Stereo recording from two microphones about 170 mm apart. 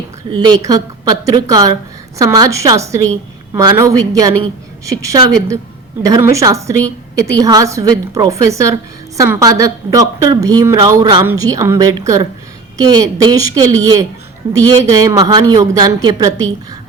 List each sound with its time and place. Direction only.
0.3 s a woman's voice: 25° right (ahead or behind)